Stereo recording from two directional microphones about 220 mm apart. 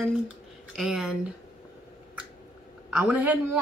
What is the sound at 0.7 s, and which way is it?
Speech, 5° right (ahead or behind).